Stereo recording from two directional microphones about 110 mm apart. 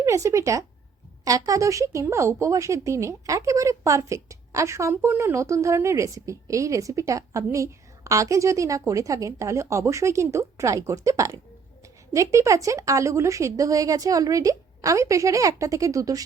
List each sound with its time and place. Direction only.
0.0 s speech: 30° right (ahead or behind)